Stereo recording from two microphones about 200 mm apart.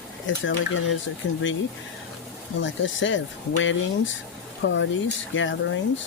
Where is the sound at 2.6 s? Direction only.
70° left (ahead or behind).